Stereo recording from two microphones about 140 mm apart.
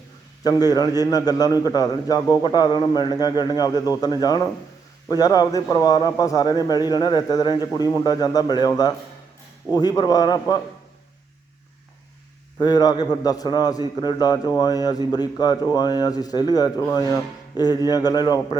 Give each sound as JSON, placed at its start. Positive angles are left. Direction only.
{"t": 0.4, "sound": "a man's voice", "side_deg": 30}
{"t": 12.5, "sound": "a man's voice", "side_deg": 30}